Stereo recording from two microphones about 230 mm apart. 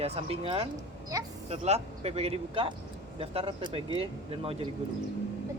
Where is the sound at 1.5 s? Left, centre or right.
Right.